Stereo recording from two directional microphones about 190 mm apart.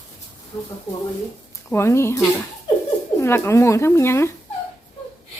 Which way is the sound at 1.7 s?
15° left (ahead or behind).